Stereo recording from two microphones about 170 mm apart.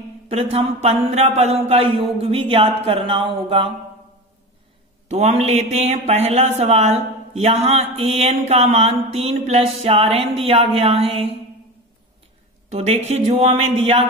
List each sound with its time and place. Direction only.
0.3 s a man's voice: 35° right (ahead or behind)
5.0 s a man's voice: 40° right (ahead or behind)
12.7 s a man's voice: 40° right (ahead or behind)